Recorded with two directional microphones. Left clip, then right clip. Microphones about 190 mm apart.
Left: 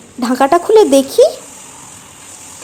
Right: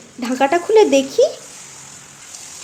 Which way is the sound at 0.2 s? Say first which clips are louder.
Left 5 dB; 35° left (ahead or behind).